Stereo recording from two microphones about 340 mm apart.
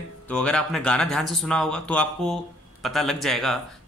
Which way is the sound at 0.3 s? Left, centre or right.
Centre.